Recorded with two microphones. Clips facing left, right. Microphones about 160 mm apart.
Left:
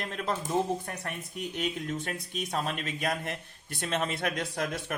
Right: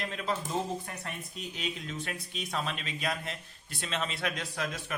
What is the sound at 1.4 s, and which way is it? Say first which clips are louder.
Speech: left 6 dB; 55° left (ahead or behind).